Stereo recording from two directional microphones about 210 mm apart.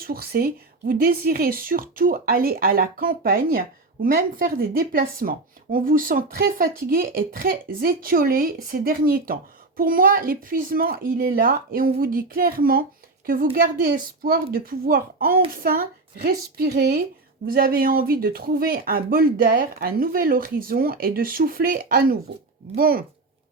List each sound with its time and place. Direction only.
0.0 s speech: 45° right (ahead or behind)